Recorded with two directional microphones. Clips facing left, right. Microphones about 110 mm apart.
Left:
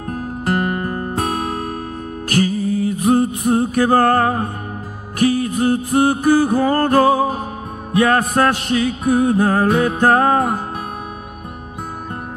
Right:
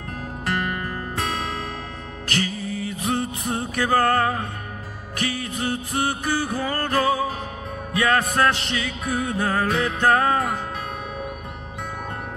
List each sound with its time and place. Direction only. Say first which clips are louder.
0.1 s music: left 7 dB; 40° left (ahead or behind)